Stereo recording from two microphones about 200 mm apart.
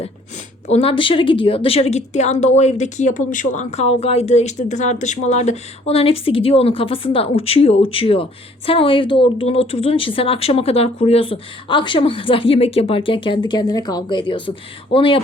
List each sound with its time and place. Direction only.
0.7 s a woman's voice: 30° left (ahead or behind)